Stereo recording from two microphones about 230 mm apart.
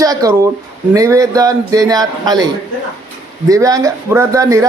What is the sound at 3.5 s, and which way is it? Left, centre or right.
Speech, centre.